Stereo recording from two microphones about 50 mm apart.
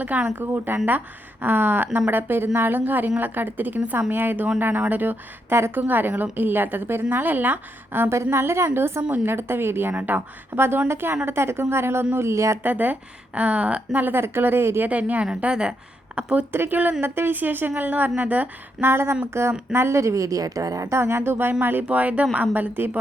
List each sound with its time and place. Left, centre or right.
0.0 s a woman's voice: right
5.5 s a woman's voice: right
5.8 s a woman's voice: right
8.1 s a woman's voice: right
9.9 s speech: right
10.8 s a woman's voice: right
12.6 s speech: right
14.0 s a woman's voice: right
14.8 s a woman's voice: right
16.5 s a woman's voice: right
18.8 s a woman's voice: right
20.7 s a woman's voice: right
21.8 s a woman's voice: right